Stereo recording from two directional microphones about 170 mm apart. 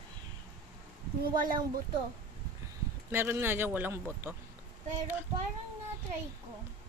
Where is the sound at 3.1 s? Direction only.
15° right (ahead or behind).